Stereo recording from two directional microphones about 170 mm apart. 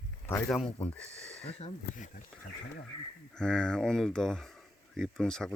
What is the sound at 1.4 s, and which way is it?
Speech, 45° left (ahead or behind).